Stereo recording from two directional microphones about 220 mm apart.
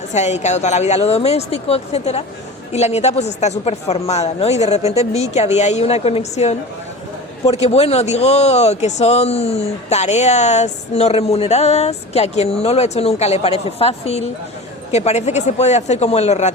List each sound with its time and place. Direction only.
0.1 s speech: 30° left (ahead or behind)